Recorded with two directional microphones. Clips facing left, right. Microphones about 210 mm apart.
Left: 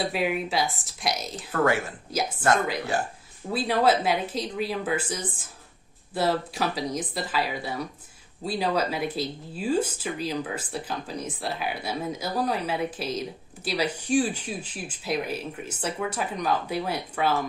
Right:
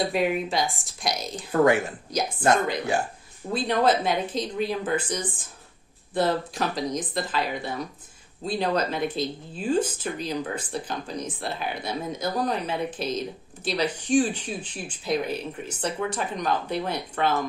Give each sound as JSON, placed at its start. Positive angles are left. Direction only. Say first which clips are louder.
{"t": 0.0, "sound": "a woman's voice", "louder": "right 2 dB", "side_deg": 5}
{"t": 1.5, "sound": "speech", "louder": "right 4 dB", "side_deg": -15}
{"t": 2.0, "sound": "a woman's voice", "louder": "left 2 dB", "side_deg": 5}
{"t": 3.5, "sound": "a woman's voice", "louder": "even", "side_deg": 5}